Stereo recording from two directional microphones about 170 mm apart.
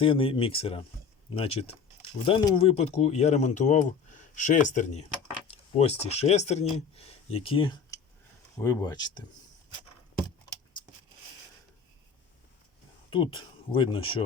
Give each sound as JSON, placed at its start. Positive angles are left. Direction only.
{"t": 0.0, "sound": "speech", "side_deg": 35}
{"t": 8.5, "sound": "speech", "side_deg": 20}
{"t": 13.1, "sound": "speech", "side_deg": 30}